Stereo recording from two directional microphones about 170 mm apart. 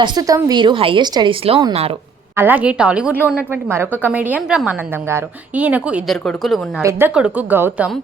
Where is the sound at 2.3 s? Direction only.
10° right (ahead or behind).